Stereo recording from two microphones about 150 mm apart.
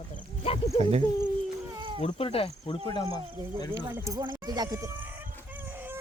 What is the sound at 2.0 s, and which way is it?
Speech, 40° left (ahead or behind).